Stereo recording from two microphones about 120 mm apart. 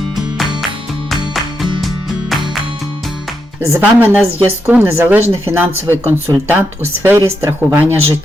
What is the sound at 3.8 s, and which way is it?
Speech, 10° right (ahead or behind).